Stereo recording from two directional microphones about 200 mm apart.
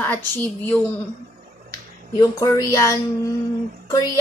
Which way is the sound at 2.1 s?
20° left (ahead or behind).